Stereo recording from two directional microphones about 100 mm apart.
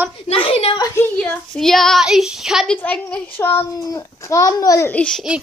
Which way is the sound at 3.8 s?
35° left (ahead or behind).